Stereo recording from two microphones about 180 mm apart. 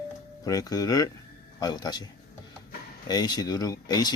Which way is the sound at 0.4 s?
20° left (ahead or behind).